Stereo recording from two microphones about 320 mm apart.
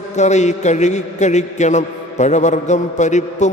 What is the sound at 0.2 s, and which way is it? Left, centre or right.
A man's voice, left.